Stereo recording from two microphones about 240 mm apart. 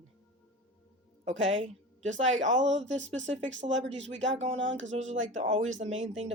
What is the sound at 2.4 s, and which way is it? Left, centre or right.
Speech, right.